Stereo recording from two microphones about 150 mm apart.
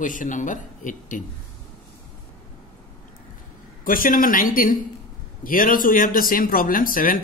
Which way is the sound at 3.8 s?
70° left (ahead or behind).